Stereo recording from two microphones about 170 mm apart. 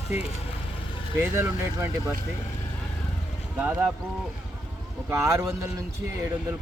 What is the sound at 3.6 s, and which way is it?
Speech, 10° right (ahead or behind).